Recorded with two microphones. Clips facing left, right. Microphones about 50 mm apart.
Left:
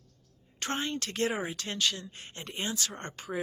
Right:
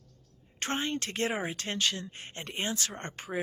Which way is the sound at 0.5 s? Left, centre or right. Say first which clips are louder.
Right 1 dB; right.